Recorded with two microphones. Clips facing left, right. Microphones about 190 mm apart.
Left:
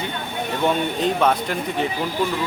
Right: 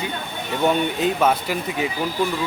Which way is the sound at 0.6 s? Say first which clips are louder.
Right 1 dB; 5° right (ahead or behind).